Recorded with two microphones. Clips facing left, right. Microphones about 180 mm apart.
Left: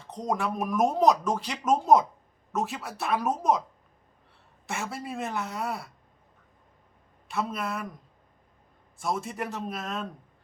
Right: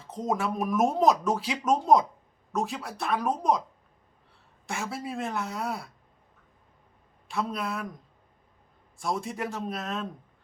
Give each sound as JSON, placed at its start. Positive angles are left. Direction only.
{"t": 0.0, "sound": "speech", "side_deg": 0}
{"t": 4.6, "sound": "speech", "side_deg": 0}
{"t": 7.3, "sound": "speech", "side_deg": 0}
{"t": 9.0, "sound": "speech", "side_deg": 0}